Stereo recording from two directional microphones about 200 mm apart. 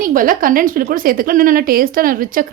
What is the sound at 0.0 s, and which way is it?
A woman's voice, 45° right (ahead or behind).